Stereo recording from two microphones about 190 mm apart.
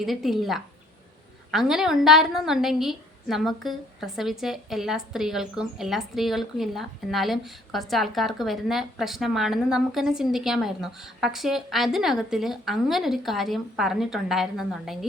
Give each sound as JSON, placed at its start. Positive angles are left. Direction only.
{"t": 0.0, "sound": "a woman's voice", "side_deg": 0}